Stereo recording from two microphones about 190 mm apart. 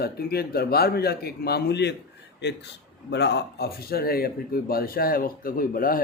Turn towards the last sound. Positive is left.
turn(degrees=50)  # may be behind; listen again after turning